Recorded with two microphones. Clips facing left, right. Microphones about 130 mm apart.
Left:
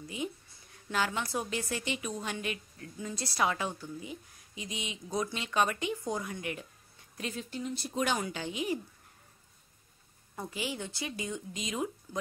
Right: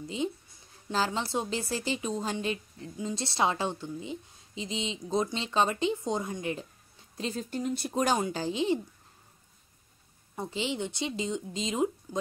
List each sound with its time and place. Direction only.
0.0 s a woman's voice: 25° right (ahead or behind)
7.5 s speech: 50° right (ahead or behind)
8.2 s speech: 35° right (ahead or behind)
10.3 s a woman's voice: 25° right (ahead or behind)